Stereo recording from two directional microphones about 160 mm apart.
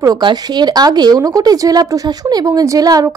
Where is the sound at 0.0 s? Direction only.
25° right (ahead or behind).